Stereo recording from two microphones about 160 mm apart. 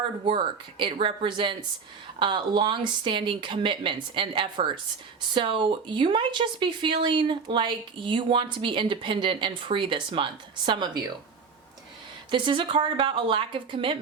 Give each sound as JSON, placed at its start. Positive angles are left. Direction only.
{"t": 0.3, "sound": "a woman's voice", "side_deg": -30}
{"t": 12.3, "sound": "speech", "side_deg": -30}